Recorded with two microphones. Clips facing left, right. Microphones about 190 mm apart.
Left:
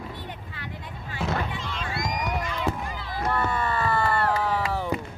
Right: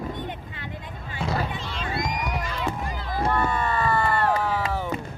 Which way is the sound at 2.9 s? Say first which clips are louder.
Right 4 dB; 45° right (ahead or behind).